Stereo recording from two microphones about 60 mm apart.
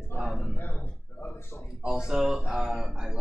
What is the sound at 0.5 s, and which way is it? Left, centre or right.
Speech, left.